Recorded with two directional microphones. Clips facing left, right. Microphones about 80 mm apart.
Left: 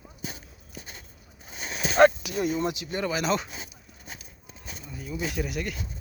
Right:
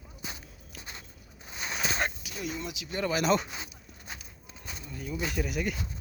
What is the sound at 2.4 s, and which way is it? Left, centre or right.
Speech, left.